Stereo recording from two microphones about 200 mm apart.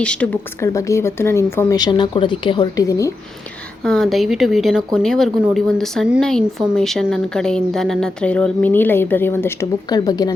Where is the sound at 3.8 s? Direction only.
Centre (ahead or behind).